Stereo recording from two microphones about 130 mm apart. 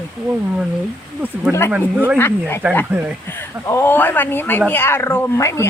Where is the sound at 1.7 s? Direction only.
10° right (ahead or behind).